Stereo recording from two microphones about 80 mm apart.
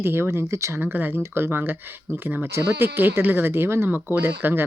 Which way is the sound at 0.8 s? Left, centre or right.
Right.